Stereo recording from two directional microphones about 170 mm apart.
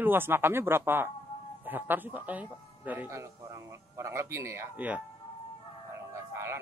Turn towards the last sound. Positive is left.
turn(degrees=-15)  # may be behind; listen again after turning